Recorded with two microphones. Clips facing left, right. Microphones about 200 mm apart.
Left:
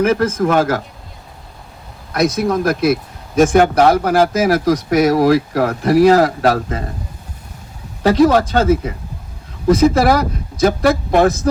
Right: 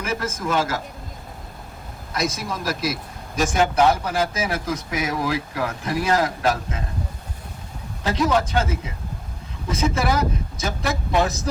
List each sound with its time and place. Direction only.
0.0 s speech: 60° left (ahead or behind)
2.1 s speech: 60° left (ahead or behind)
8.0 s speech: 70° left (ahead or behind)
9.9 s speech: 65° left (ahead or behind)